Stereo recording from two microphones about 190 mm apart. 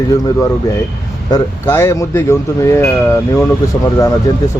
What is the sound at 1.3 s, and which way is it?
Speech, 15° left (ahead or behind).